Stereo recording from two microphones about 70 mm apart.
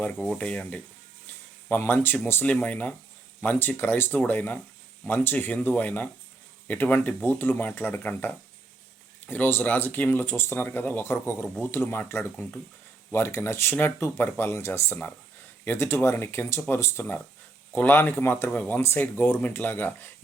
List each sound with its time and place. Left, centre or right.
0.3 s speech: centre
1.8 s speech: left